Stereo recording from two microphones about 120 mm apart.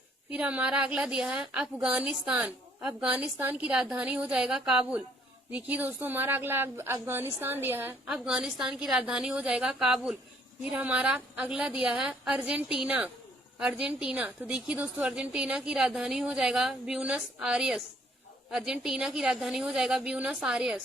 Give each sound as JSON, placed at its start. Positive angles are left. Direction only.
{"t": 0.3, "sound": "a woman's voice", "side_deg": -10}
{"t": 8.0, "sound": "a woman's voice", "side_deg": -5}